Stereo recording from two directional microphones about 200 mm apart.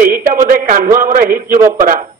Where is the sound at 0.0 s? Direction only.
45° right (ahead or behind).